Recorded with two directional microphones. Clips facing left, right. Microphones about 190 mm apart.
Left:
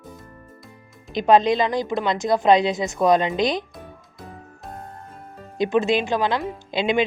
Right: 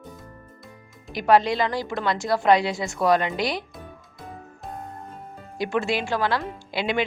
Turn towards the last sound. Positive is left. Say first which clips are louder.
# left 4 dB
turn(degrees=20)  # may be behind; listen again after turning